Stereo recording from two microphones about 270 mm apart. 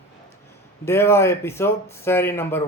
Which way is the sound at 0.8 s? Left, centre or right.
Centre.